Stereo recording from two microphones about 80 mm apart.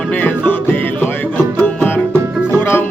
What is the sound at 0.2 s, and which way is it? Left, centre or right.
Music, left.